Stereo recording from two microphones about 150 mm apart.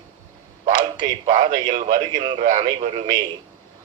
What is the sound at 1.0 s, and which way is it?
A man's voice, 65° right (ahead or behind).